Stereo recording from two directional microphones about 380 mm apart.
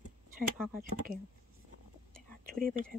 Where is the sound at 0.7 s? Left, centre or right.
Right.